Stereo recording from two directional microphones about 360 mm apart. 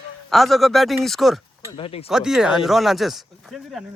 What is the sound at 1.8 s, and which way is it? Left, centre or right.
Speech, centre.